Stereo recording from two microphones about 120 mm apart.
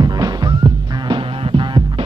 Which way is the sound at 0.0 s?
35° right (ahead or behind).